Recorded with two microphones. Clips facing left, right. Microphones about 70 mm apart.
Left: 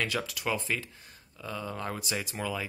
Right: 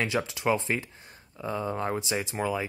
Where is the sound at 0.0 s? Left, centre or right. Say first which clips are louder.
Right 4 dB; right.